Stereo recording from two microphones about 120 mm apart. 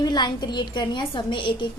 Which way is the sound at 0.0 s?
35° left (ahead or behind).